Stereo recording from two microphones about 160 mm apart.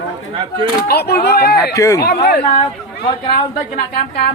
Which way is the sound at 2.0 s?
85° left.